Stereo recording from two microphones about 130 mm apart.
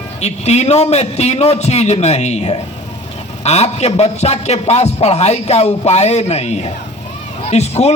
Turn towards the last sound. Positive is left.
turn(degrees=55)  # may be behind; listen again after turning